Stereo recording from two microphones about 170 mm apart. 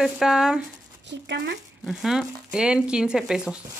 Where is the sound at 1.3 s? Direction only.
90° right.